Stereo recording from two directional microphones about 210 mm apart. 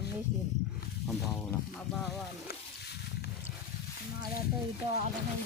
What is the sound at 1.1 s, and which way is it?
Speech, 5° left (ahead or behind).